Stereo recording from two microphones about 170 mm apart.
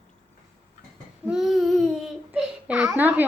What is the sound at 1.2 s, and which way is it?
Babbling, centre (ahead or behind).